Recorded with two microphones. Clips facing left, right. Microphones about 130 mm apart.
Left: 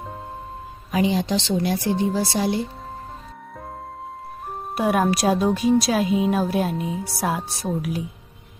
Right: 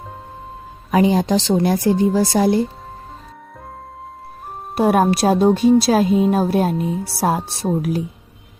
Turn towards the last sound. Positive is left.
turn(degrees=-30)  # may be behind; listen again after turning